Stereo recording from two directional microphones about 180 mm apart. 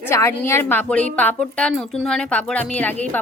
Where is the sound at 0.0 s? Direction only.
15° left (ahead or behind).